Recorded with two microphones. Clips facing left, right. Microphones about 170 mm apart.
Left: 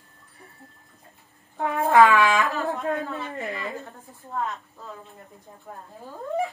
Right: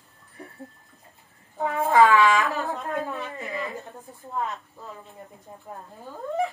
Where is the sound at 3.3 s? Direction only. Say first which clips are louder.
Left 1 dB; 65° left (ahead or behind).